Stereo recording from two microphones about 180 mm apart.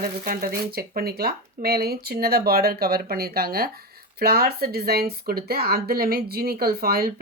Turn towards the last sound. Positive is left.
turn(degrees=-55)  # may be behind; listen again after turning